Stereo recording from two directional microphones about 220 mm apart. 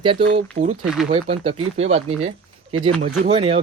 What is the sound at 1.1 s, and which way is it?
Speech, 25° right (ahead or behind).